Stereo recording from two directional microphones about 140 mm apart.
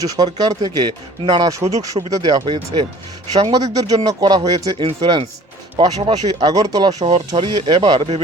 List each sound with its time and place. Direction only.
0.0 s speech: 30° right (ahead or behind)
4.8 s speech: 45° right (ahead or behind)